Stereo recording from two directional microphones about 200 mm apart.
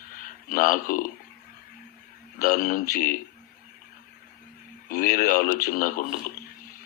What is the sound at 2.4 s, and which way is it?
Speech, 40° left (ahead or behind).